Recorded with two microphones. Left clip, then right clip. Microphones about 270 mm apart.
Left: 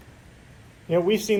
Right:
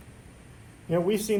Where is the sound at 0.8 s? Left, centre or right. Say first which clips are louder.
Left 4 dB; left.